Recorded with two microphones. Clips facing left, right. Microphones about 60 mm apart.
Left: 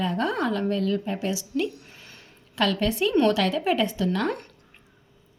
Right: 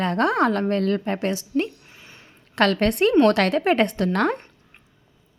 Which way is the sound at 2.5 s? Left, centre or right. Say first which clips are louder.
Right 5 dB; right.